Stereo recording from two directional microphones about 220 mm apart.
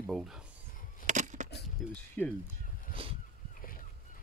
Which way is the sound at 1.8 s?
Centre (ahead or behind).